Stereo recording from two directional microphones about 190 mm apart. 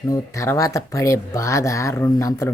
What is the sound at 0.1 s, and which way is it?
Speech, 15° left (ahead or behind).